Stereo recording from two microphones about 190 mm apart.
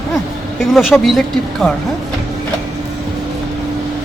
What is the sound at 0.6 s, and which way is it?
Speech, centre (ahead or behind).